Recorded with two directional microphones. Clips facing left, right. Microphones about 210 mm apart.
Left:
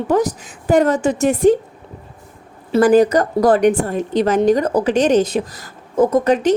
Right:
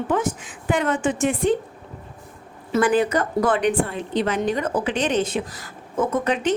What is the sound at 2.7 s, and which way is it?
A woman's voice, 40° left (ahead or behind).